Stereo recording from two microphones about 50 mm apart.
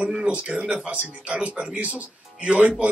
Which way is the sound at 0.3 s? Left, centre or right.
Right.